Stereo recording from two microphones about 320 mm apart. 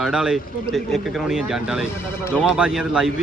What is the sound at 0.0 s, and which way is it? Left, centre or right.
A man's voice, centre.